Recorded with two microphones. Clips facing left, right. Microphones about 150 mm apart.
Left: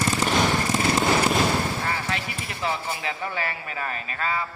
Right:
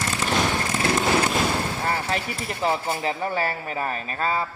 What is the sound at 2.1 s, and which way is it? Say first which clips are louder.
Speech: right 3 dB; 35° right (ahead or behind).